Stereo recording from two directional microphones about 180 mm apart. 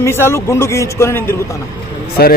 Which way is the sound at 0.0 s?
15° left (ahead or behind).